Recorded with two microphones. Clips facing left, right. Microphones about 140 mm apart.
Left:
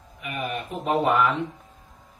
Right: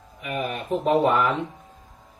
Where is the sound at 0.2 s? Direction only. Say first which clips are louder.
Right 2 dB; 40° right (ahead or behind).